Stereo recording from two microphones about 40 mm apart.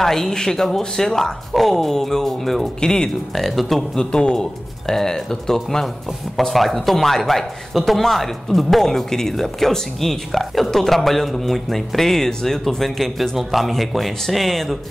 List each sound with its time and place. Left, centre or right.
0.0 s speech: centre
2.8 s speech: centre
3.3 s speech: centre
3.9 s speech: left